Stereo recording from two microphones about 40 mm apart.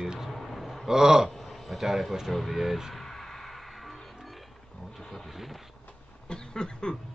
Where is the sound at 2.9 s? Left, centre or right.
Centre.